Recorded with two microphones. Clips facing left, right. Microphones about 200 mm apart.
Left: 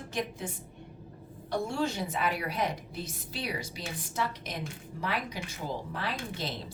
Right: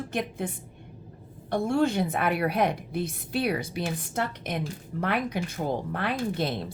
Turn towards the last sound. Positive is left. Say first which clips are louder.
# right 9 dB
turn(degrees=-55)  # may be behind; listen again after turning